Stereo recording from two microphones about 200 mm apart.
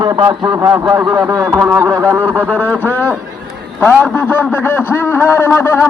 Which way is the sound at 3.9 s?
5° right (ahead or behind).